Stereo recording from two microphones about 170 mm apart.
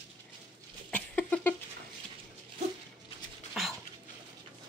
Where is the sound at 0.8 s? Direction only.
10° left (ahead or behind).